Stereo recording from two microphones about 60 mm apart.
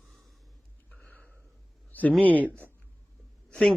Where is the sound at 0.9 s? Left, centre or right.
Left.